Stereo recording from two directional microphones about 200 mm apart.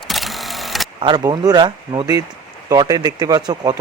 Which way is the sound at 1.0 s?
20° right (ahead or behind).